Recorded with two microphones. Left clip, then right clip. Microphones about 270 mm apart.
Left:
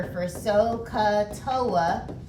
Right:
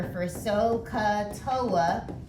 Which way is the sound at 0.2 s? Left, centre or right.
Centre.